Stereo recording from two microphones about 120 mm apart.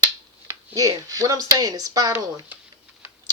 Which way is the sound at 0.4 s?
30° right (ahead or behind).